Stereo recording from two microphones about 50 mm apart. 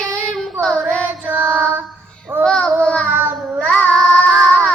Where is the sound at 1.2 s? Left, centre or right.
Right.